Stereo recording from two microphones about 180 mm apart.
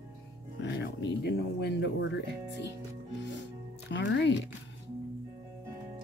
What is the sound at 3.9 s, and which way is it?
Speech, 75° left (ahead or behind).